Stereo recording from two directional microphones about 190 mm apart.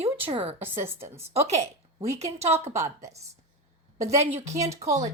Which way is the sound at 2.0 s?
35° right (ahead or behind).